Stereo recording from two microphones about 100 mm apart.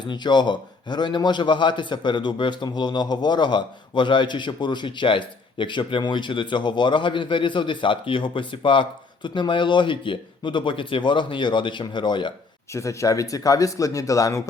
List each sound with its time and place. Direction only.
0.0 s a man's voice: 50° left (ahead or behind)
12.7 s speech: 30° left (ahead or behind)